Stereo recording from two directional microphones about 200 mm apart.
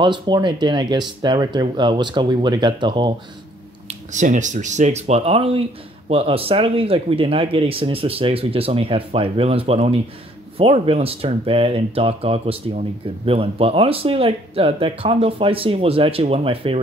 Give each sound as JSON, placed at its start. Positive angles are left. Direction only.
{"t": 0.0, "sound": "speech", "side_deg": -25}
{"t": 3.8, "sound": "speech", "side_deg": -40}